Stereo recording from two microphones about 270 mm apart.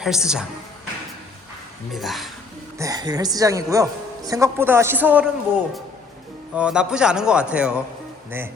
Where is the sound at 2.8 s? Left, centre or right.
Centre.